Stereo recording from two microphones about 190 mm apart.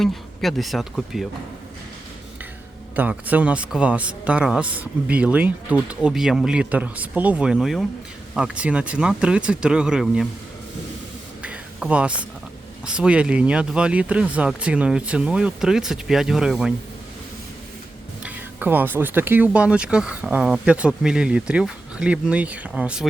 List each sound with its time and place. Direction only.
0.0 s speech: centre (ahead or behind)
2.9 s speech: 10° right (ahead or behind)
11.4 s a sound: 5° right (ahead or behind)
12.8 s speech: 5° right (ahead or behind)
18.2 s speech: 10° right (ahead or behind)